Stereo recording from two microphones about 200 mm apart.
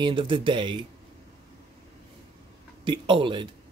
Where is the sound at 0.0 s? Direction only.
25° right (ahead or behind).